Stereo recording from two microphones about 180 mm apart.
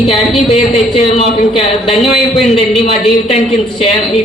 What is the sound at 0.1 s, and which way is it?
A woman's voice, 35° left (ahead or behind).